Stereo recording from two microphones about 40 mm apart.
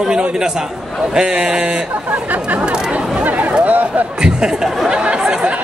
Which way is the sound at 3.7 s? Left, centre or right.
Right.